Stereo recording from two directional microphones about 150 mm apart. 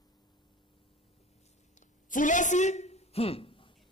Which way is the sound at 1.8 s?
60° left (ahead or behind).